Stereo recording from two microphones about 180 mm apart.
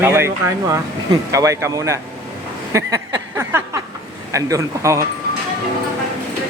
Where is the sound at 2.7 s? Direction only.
15° right (ahead or behind).